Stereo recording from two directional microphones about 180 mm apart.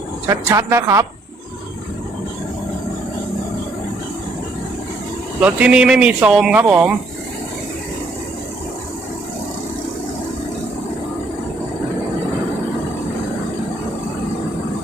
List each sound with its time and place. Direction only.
0.3 s speech: 15° right (ahead or behind)
5.4 s speech: 10° right (ahead or behind)